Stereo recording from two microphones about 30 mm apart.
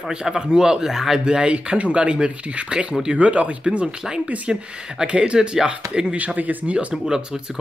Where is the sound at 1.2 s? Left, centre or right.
Right.